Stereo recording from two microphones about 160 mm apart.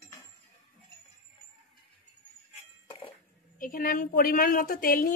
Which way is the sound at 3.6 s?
60° left (ahead or behind).